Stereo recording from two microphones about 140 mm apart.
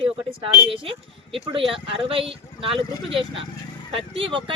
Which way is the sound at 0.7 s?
40° right (ahead or behind).